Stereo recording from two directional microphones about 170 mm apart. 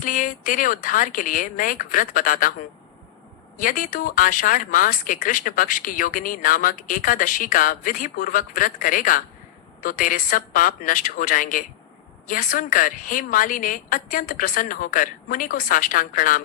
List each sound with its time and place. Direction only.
0.0 s speech: 50° left (ahead or behind)